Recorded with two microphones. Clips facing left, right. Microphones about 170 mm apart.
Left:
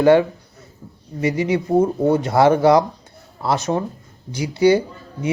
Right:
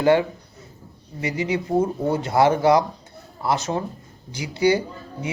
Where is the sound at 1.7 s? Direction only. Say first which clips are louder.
Left 6 dB; 20° left (ahead or behind).